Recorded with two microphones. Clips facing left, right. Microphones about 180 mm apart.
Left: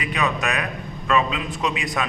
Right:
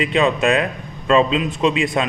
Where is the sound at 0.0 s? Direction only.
25° right (ahead or behind).